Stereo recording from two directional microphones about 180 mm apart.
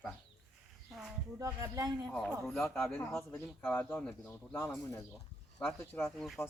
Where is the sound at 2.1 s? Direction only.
5° left (ahead or behind).